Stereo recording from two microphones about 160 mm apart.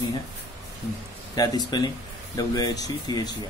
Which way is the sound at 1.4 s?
25° left (ahead or behind).